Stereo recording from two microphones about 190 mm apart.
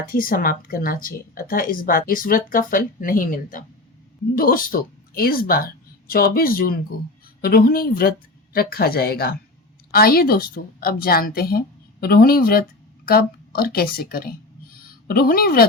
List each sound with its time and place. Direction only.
0.1 s speech: 50° left (ahead or behind)